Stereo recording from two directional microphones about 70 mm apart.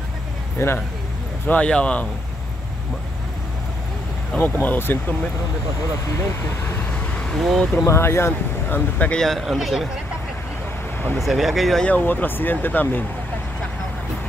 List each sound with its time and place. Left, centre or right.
0.6 s speech: left
1.5 s speech: centre
4.4 s speech: left
7.3 s speech: centre
7.8 s speech: left
9.1 s speech: centre
11.1 s speech: centre
11.8 s speech: left